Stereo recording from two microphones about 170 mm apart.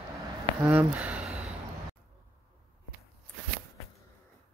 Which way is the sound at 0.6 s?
10° right (ahead or behind).